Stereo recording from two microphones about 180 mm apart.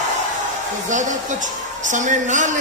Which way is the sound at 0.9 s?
45° right (ahead or behind).